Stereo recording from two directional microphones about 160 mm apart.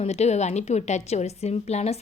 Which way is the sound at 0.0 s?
45° left (ahead or behind).